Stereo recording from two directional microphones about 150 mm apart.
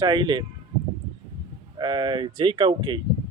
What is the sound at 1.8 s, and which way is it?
Speech, 30° right (ahead or behind).